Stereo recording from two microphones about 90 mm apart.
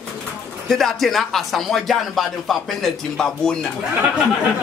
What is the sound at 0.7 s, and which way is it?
Speech, 5° left (ahead or behind).